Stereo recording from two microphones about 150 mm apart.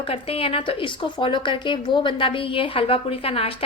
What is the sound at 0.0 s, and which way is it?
A woman's voice, 40° left (ahead or behind).